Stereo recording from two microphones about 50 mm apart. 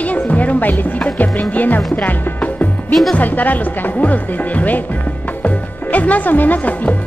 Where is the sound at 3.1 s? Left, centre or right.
Left.